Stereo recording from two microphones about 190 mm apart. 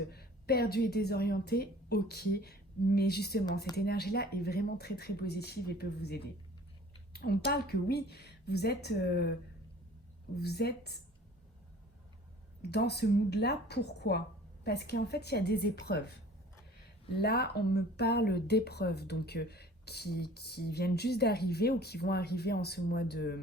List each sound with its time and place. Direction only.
0.1 s a woman's voice: 55° left (ahead or behind)
10.4 s a woman's voice: 60° left (ahead or behind)
12.7 s a woman's voice: 60° left (ahead or behind)
17.2 s a woman's voice: 55° left (ahead or behind)